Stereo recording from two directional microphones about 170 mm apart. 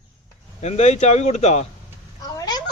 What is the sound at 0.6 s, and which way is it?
Speech, 40° left (ahead or behind).